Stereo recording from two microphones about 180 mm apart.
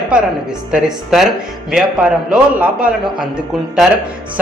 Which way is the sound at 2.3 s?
5° right (ahead or behind).